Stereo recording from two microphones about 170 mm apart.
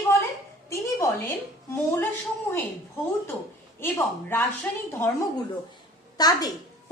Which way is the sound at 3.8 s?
15° left (ahead or behind).